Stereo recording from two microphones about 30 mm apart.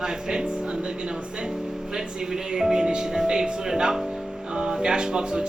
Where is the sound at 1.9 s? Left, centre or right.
Centre.